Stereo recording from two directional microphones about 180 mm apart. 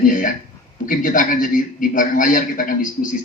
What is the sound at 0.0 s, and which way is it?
A man's voice, 50° left (ahead or behind).